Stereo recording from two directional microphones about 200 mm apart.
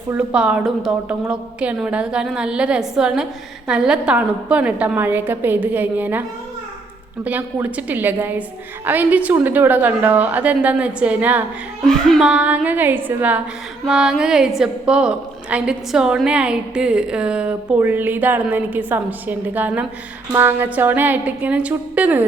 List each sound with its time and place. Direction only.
0.1 s a woman's voice: 5° right (ahead or behind)
7.3 s a woman's voice: 10° right (ahead or behind)
11.9 s a woman's voice: centre (ahead or behind)